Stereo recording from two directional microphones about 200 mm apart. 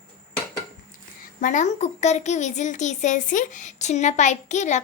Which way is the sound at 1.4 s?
40° left (ahead or behind).